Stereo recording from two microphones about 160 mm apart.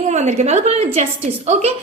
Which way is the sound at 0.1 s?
45° right (ahead or behind).